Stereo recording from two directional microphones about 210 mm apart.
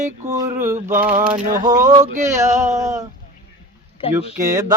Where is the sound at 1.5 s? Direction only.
20° right (ahead or behind).